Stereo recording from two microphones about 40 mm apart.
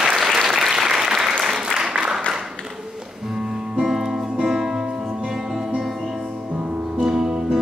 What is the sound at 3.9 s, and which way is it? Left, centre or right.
Music, centre.